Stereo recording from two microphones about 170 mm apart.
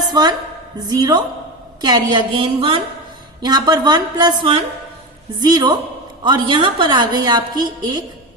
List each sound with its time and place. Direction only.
0.1 s a woman's voice: 25° right (ahead or behind)